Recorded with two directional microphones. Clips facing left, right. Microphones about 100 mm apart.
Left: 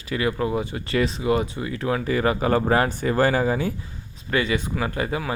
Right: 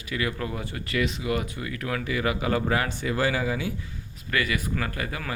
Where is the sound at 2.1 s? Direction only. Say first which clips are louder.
Left 5 dB; 40° left (ahead or behind).